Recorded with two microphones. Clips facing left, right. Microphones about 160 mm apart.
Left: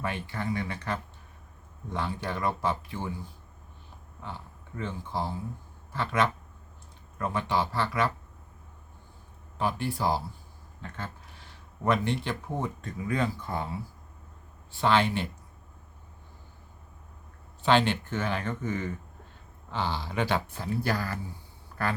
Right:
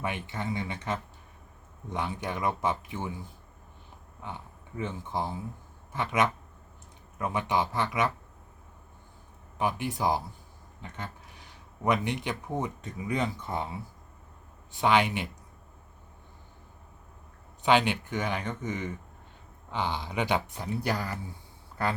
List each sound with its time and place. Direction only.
0.0 s speech: 15° right (ahead or behind)
4.2 s speech: 15° right (ahead or behind)
9.6 s speech: 15° right (ahead or behind)
10.8 s a sound: 20° right (ahead or behind)
11.8 s speech: 15° right (ahead or behind)
17.6 s speech: 15° right (ahead or behind)